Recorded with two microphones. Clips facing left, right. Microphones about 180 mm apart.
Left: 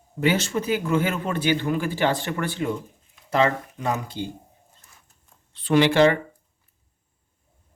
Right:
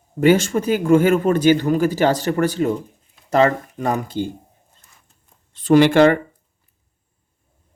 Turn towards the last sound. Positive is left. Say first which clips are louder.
# right 5 dB
turn(degrees=-55)  # may be behind; listen again after turning